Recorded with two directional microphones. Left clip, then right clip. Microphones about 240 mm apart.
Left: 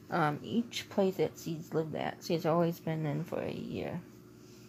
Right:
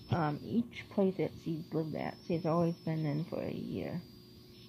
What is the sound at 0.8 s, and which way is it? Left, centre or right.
Speech, left.